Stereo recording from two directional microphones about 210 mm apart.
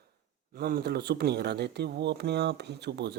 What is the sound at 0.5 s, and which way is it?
Speech, 45° right (ahead or behind).